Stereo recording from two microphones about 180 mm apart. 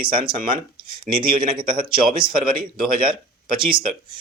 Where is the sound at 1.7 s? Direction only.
50° right (ahead or behind).